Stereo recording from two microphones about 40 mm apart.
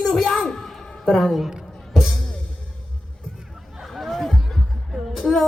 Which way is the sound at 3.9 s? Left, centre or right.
Centre.